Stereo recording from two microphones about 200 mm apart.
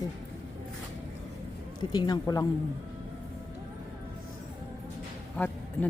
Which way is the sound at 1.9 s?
20° left (ahead or behind).